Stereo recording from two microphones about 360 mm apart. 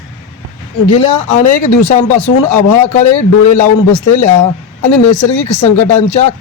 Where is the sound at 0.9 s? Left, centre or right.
Centre.